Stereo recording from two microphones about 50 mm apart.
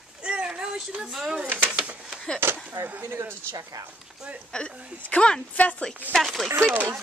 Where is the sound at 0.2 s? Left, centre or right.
Right.